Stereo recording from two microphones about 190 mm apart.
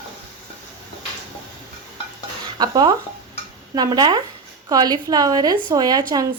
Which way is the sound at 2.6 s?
20° right (ahead or behind).